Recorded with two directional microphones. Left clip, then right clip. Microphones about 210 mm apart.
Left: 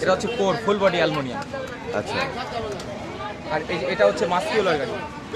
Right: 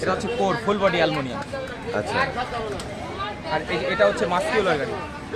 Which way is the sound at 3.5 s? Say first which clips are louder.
Even; 10° left (ahead or behind).